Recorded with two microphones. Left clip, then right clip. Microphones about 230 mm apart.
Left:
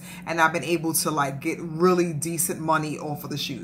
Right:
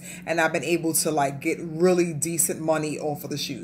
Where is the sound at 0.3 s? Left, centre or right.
Centre.